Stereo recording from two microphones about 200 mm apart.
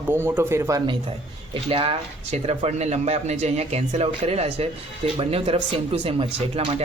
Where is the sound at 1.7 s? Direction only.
30° right (ahead or behind).